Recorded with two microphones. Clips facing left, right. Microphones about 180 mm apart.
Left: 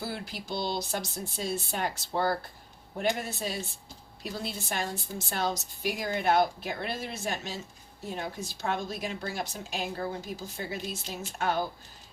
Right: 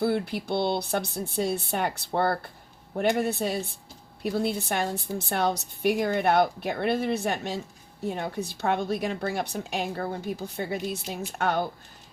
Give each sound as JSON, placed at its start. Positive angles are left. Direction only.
{"t": 0.0, "sound": "a woman's voice", "side_deg": -60}